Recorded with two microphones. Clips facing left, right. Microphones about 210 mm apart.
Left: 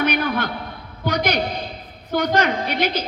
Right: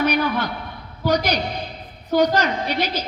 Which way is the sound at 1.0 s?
55° left (ahead or behind).